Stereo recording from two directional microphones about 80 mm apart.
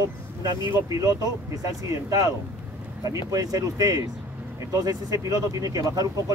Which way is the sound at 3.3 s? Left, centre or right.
Right.